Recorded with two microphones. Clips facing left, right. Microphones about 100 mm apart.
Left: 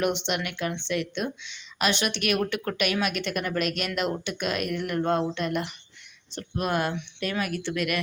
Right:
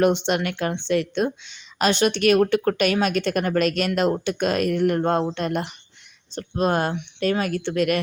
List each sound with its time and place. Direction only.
0.0 s speech: 35° right (ahead or behind)